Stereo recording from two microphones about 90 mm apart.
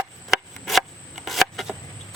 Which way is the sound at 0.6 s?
Centre (ahead or behind).